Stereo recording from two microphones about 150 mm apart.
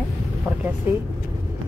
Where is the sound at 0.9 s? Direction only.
15° right (ahead or behind).